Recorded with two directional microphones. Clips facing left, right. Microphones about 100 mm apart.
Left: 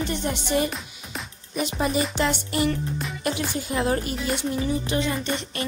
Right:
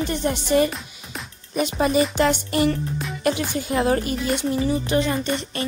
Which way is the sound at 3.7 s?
90° right.